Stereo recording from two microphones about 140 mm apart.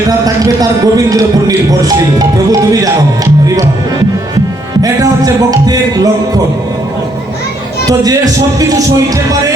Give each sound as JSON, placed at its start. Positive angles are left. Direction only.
{"t": 0.3, "sound": "speech", "side_deg": -25}
{"t": 4.8, "sound": "music", "side_deg": -25}
{"t": 7.9, "sound": "speech", "side_deg": -25}